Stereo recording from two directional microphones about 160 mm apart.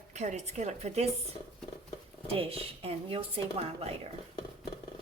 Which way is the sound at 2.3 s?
35° right (ahead or behind).